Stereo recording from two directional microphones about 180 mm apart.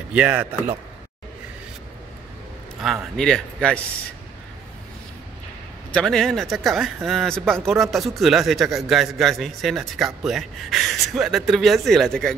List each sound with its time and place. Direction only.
0.1 s speech: 5° right (ahead or behind)
2.8 s speech: centre (ahead or behind)
5.9 s speech: 5° left (ahead or behind)